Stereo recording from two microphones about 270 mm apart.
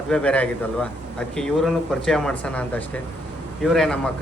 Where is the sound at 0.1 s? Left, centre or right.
Centre.